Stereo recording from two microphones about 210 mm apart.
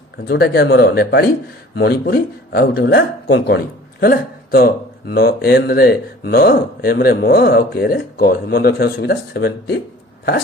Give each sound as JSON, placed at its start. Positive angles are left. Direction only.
{"t": 0.3, "sound": "speech", "side_deg": 50}